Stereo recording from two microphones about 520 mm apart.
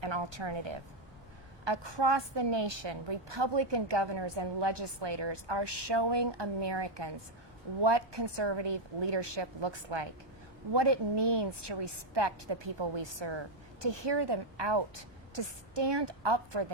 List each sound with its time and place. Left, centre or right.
0.0 s a woman's voice: right